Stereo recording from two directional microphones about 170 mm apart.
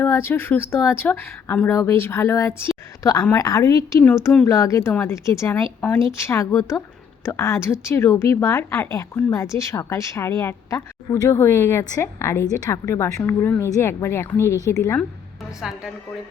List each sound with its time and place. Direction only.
0.0 s a woman's voice: 15° left (ahead or behind)
15.6 s a woman's voice: centre (ahead or behind)